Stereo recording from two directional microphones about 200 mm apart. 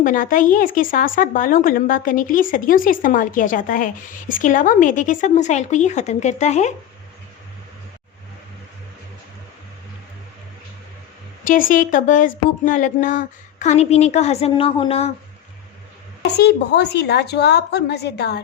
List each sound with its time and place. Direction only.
0.0 s a woman's voice: 40° left (ahead or behind)
11.4 s speech: 40° left (ahead or behind)
16.2 s a woman's voice: 55° left (ahead or behind)